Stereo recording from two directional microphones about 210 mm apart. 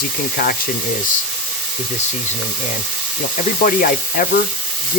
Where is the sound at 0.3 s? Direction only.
45° left (ahead or behind).